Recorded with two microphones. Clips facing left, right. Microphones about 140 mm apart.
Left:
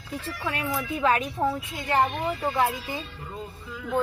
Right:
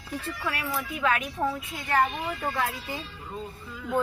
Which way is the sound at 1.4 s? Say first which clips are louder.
Left 2 dB; 20° left (ahead or behind).